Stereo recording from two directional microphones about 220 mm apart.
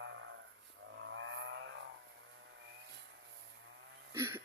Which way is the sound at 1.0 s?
60° right (ahead or behind).